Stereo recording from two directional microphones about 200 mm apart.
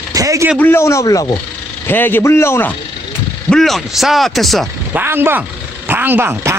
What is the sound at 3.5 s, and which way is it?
Speech, centre (ahead or behind).